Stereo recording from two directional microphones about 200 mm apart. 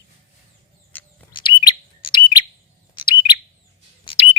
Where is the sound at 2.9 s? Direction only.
25° left (ahead or behind).